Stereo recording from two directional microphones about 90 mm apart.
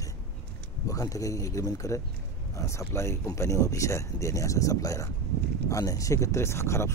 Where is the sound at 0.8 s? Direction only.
40° left (ahead or behind).